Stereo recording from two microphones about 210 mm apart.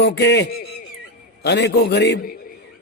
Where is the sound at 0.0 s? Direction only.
50° left (ahead or behind).